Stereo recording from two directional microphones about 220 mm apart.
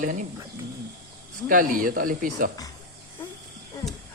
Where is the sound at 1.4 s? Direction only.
40° right (ahead or behind).